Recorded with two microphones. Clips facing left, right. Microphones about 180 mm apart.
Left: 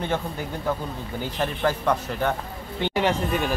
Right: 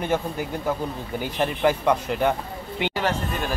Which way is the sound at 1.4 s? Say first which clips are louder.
Right 3 dB; 15° right (ahead or behind).